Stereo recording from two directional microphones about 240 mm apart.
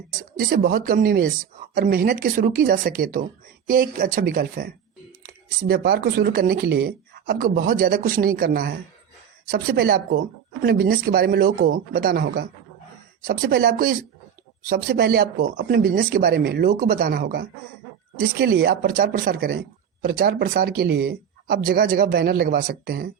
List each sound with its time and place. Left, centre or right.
0.2 s speech: right